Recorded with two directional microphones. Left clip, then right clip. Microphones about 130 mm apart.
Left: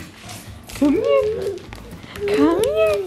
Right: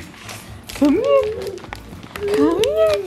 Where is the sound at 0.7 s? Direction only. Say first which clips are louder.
Right 2 dB; 15° right (ahead or behind).